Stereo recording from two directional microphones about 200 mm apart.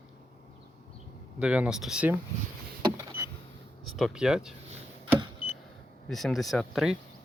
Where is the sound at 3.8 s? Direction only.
Centre (ahead or behind).